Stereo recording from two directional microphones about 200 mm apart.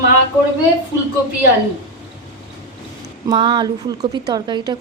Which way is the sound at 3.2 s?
20° right (ahead or behind).